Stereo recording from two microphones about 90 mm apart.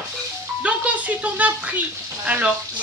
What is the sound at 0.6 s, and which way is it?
Speech, 15° right (ahead or behind).